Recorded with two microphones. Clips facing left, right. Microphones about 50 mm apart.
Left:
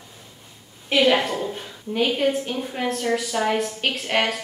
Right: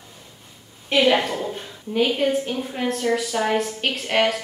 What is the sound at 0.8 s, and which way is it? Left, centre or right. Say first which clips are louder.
A woman's voice: even; centre.